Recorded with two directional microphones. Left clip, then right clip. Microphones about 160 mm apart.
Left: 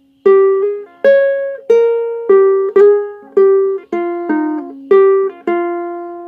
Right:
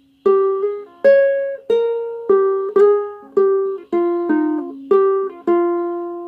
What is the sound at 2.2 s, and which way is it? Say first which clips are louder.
Music: left 6 dB; 35° left (ahead or behind).